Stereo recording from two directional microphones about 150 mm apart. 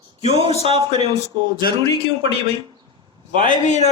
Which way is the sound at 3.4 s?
55° left (ahead or behind).